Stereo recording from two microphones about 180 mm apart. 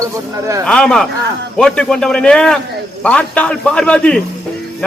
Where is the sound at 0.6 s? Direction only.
5° left (ahead or behind).